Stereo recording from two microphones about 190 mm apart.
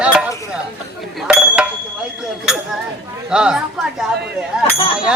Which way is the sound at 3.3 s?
5° right (ahead or behind).